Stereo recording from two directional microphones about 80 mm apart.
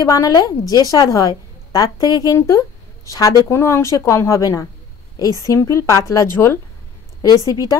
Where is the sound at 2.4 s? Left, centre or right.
Left.